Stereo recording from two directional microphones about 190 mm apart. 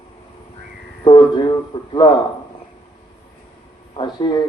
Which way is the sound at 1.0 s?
25° left (ahead or behind).